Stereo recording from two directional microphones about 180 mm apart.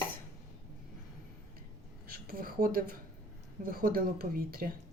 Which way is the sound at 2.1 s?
55° right (ahead or behind).